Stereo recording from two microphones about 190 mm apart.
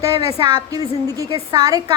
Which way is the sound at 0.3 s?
20° right (ahead or behind).